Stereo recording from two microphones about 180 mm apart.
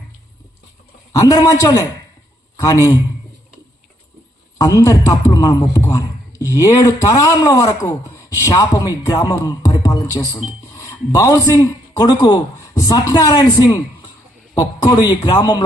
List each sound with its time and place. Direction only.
1.1 s speech: 20° left (ahead or behind)
4.5 s speech: 20° left (ahead or behind)